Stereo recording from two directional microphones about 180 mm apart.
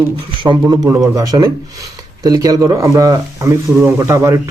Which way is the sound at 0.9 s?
20° right (ahead or behind).